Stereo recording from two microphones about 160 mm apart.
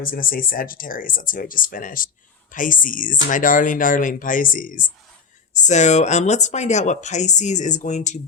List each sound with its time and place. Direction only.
0.0 s speech: 60° left (ahead or behind)
5.5 s speech: 50° left (ahead or behind)